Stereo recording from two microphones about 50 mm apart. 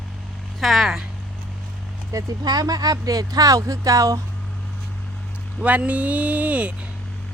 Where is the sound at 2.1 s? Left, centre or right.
Right.